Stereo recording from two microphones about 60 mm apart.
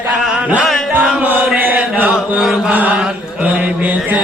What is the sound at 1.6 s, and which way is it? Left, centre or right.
Chant, right.